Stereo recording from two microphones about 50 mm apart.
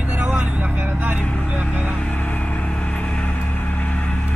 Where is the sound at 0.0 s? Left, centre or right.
Right.